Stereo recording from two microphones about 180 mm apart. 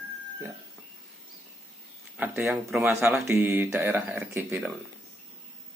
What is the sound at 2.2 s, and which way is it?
A man's voice, 15° right (ahead or behind).